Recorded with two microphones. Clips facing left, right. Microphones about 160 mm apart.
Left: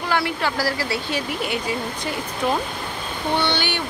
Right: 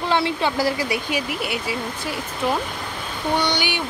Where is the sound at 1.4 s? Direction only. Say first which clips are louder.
Left 1 dB; 5° right (ahead or behind).